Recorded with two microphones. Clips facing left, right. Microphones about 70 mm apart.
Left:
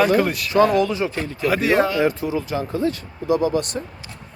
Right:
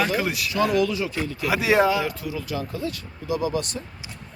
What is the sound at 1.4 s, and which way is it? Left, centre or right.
Speech, centre.